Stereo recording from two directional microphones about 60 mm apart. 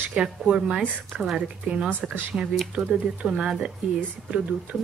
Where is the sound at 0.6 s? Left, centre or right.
Right.